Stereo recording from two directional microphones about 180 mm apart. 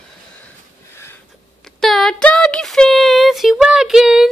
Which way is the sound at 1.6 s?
Centre (ahead or behind).